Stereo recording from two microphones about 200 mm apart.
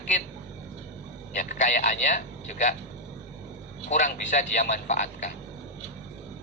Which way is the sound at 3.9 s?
40° left (ahead or behind).